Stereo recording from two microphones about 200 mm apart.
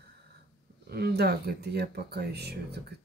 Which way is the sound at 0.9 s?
55° right (ahead or behind).